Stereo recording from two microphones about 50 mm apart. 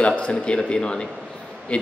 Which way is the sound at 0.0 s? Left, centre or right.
Left.